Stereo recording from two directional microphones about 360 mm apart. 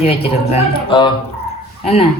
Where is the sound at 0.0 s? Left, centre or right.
Centre.